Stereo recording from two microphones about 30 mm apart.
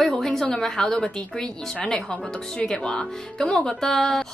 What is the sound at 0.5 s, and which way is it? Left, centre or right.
Speech, centre.